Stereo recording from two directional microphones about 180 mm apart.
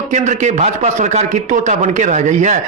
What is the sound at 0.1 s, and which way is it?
A man's voice, 40° right (ahead or behind).